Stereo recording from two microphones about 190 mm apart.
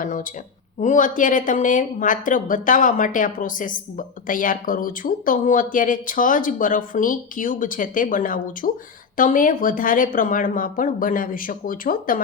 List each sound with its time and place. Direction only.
0.0 s speech: 45° left (ahead or behind)